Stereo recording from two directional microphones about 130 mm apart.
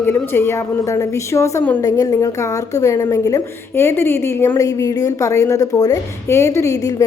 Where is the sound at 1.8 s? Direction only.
30° left (ahead or behind).